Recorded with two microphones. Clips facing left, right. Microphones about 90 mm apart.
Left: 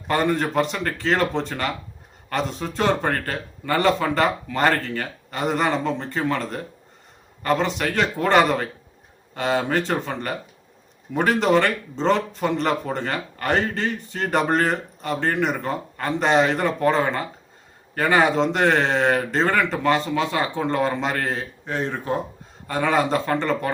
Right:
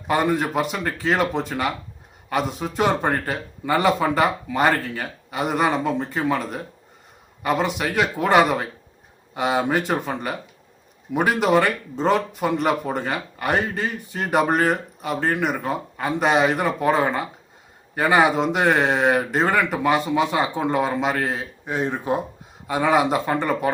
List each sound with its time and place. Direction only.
0.1 s speech: 10° right (ahead or behind)